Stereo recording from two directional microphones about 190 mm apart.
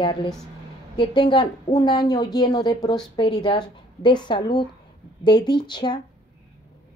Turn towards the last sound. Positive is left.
turn(degrees=25)  # may be behind; listen again after turning